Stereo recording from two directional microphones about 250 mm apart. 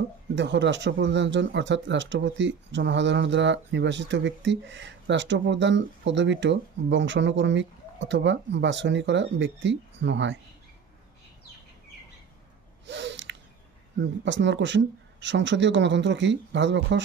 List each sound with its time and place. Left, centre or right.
0.4 s speech: right
12.8 s a sound: right
13.9 s speech: right